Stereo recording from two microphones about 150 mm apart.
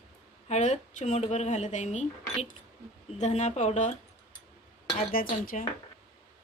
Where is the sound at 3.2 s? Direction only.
50° left (ahead or behind).